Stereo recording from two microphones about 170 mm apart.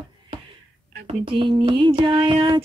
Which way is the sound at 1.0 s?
30° right (ahead or behind).